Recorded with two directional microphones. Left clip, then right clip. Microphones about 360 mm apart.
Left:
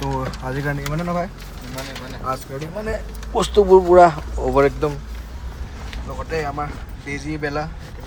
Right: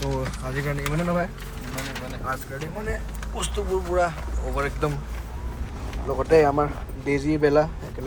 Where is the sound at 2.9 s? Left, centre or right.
Centre.